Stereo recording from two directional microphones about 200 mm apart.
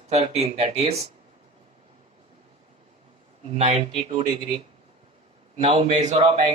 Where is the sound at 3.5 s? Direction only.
30° right (ahead or behind).